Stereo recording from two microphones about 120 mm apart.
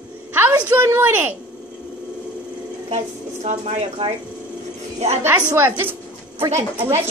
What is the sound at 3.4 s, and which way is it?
A woman's voice, 70° right (ahead or behind).